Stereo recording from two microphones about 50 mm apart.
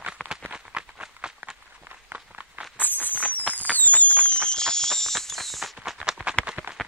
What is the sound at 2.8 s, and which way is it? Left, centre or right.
Fireworks, left.